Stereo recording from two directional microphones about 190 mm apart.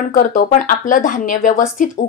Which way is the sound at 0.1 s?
45° left (ahead or behind).